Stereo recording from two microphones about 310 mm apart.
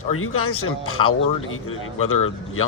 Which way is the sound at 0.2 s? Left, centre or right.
Left.